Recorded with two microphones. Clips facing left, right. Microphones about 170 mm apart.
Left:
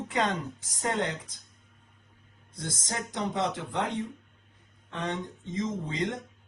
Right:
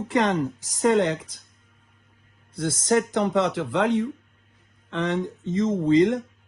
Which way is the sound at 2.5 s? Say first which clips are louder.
Right 14 dB; 75° right (ahead or behind).